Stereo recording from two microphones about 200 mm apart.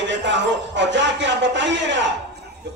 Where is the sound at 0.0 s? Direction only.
65° right (ahead or behind).